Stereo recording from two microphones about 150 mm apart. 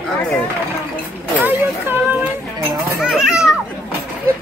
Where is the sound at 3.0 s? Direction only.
5° right (ahead or behind).